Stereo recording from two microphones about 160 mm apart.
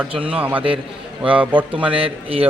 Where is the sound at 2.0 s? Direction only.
35° right (ahead or behind).